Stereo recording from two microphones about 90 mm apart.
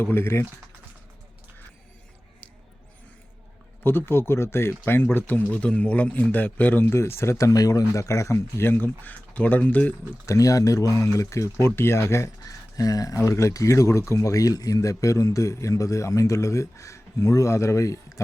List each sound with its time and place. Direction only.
0.0 s speech: 25° left (ahead or behind)
3.8 s speech: 25° left (ahead or behind)
10.2 s speech: 40° left (ahead or behind)